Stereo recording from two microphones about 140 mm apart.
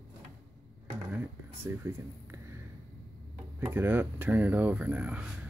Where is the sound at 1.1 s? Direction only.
15° right (ahead or behind).